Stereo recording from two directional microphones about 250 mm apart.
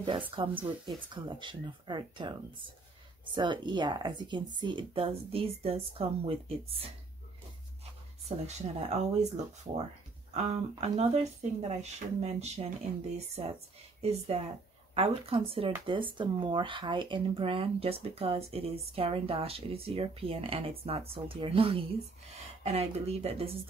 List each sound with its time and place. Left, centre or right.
0.4 s speech: centre
3.3 s speech: centre
14.0 s speech: right